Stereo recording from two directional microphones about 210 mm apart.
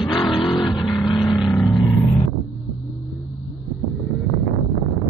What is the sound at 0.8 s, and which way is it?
Vehicle, centre (ahead or behind).